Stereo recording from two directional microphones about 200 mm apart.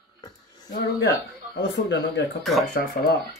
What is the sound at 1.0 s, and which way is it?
Speech, 60° left (ahead or behind).